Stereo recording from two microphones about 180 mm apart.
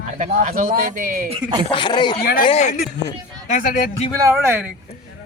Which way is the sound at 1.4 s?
20° right (ahead or behind).